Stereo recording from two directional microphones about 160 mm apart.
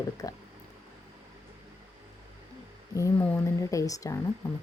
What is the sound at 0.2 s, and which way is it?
Speech, 25° left (ahead or behind).